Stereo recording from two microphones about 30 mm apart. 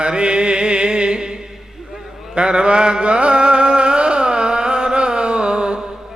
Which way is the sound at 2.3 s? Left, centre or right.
Right.